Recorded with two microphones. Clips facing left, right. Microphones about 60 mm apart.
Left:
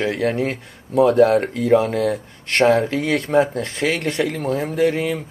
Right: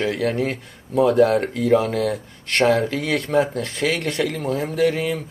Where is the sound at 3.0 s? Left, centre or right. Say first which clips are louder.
Left 2 dB; centre.